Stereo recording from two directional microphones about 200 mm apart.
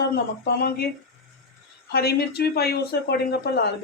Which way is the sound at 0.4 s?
50° left (ahead or behind).